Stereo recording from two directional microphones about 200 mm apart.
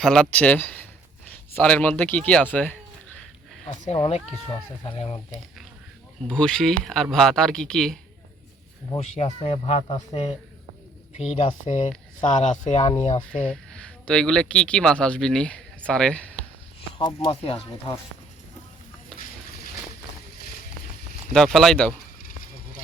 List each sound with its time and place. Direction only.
0.0 s speech: 5° left (ahead or behind)
4.0 s speech: 30° left (ahead or behind)
6.2 s speech: 5° left (ahead or behind)
9.0 s speech: 30° left (ahead or behind)
13.4 s speech: 5° left (ahead or behind)
17.0 s speech: 20° left (ahead or behind)
21.3 s speech: centre (ahead or behind)